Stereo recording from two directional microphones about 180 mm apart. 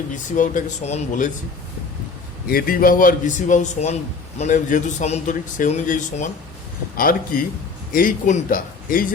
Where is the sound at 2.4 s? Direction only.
55° left (ahead or behind).